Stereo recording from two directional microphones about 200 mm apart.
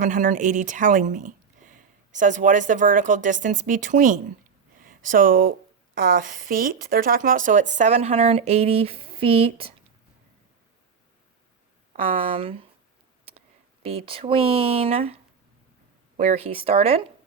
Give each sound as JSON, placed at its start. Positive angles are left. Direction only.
{"t": 0.0, "sound": "a woman's voice", "side_deg": -40}
{"t": 12.1, "sound": "speech", "side_deg": -30}
{"t": 13.8, "sound": "speech", "side_deg": -30}
{"t": 16.1, "sound": "a woman's voice", "side_deg": -35}